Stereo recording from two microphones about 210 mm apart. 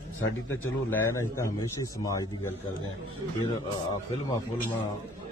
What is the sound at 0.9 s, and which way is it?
A man's voice, 15° left (ahead or behind).